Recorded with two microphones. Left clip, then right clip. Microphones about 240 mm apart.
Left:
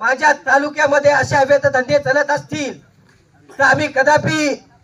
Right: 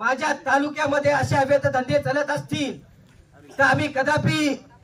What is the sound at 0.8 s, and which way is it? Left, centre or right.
Speech, left.